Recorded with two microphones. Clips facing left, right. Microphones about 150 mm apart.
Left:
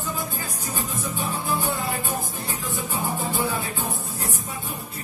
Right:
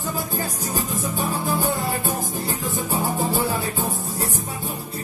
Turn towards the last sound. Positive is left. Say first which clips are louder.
# right 3 dB
turn(degrees=-40)  # may be behind; listen again after turning